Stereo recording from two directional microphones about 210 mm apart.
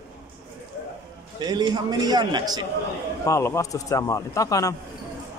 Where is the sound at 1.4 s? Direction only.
20° right (ahead or behind).